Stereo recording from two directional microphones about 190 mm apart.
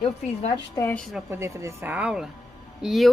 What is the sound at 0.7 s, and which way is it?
Speech, 15° left (ahead or behind).